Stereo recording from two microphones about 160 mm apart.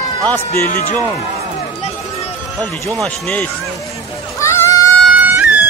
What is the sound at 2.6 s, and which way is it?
Speech, 20° right (ahead or behind).